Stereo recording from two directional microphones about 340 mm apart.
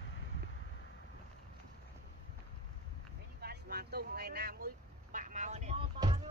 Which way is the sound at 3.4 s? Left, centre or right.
Right.